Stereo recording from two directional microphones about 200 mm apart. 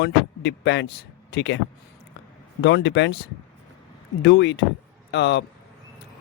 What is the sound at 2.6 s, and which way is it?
Speech, 60° left (ahead or behind).